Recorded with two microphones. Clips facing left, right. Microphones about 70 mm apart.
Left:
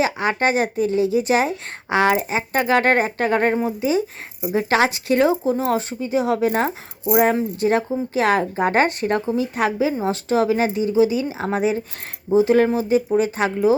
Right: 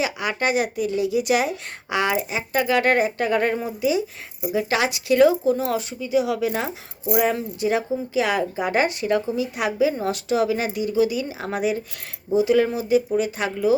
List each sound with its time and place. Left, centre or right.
0.0 s a woman's voice: left